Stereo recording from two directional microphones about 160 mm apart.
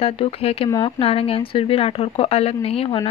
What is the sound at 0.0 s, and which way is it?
Speech, 35° left (ahead or behind).